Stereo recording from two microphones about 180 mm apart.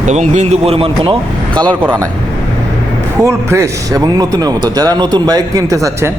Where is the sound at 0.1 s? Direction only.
40° right (ahead or behind).